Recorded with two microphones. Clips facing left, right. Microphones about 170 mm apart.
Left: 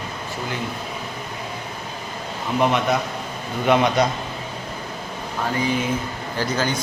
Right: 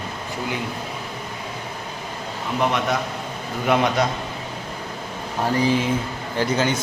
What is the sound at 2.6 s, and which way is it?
A man's voice, centre (ahead or behind).